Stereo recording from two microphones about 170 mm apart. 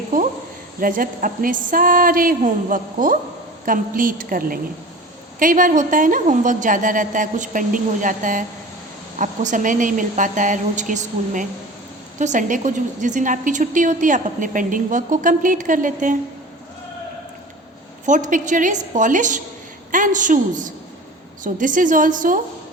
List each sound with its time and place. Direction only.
0.1 s a woman's voice: 50° right (ahead or behind)
0.8 s a sound: 55° right (ahead or behind)
3.7 s a woman's voice: 55° right (ahead or behind)
18.0 s a woman's voice: 45° right (ahead or behind)